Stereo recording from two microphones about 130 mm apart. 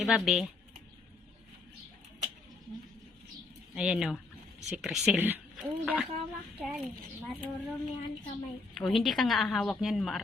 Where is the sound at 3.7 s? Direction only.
5° right (ahead or behind).